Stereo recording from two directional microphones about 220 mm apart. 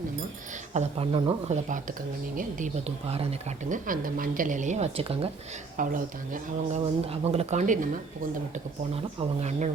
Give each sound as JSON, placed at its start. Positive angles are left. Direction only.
{"t": 0.7, "sound": "speech", "side_deg": -30}
{"t": 5.7, "sound": "speech", "side_deg": -40}
{"t": 9.1, "sound": "speech", "side_deg": -30}